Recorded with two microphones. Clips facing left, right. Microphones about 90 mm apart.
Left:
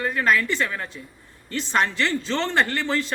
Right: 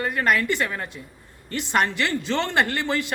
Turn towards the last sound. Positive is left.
turn(degrees=-15)  # may be behind; listen again after turning